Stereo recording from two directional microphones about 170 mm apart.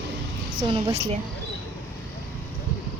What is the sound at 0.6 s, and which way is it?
Speech, 30° right (ahead or behind).